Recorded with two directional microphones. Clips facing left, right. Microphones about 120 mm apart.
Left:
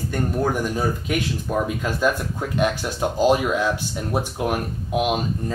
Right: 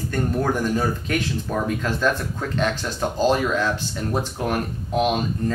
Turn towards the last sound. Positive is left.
turn(degrees=10)  # may be behind; listen again after turning